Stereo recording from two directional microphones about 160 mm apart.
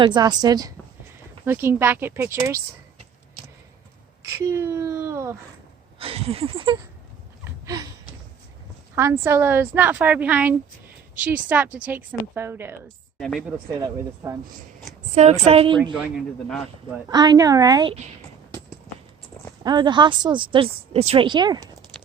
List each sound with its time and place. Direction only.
0.0 s a woman's voice: 25° right (ahead or behind)
1.5 s a woman's voice: 15° right (ahead or behind)
4.4 s speech: 15° right (ahead or behind)
6.0 s a sound: 35° right (ahead or behind)
7.6 s a sound: 20° right (ahead or behind)
9.0 s a woman's voice: 15° right (ahead or behind)
13.1 s speech: centre (ahead or behind)
13.7 s a woman's voice: 20° right (ahead or behind)
15.1 s a sound: 40° right (ahead or behind)
16.0 s speech: centre (ahead or behind)
17.1 s a woman's voice: 25° right (ahead or behind)
19.6 s a woman's voice: 30° right (ahead or behind)